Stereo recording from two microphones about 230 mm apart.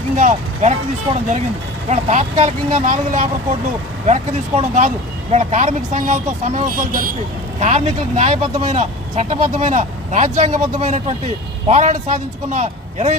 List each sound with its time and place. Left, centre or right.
0.2 s speech: right